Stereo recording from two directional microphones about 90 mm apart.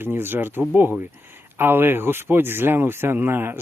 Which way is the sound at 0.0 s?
25° right (ahead or behind).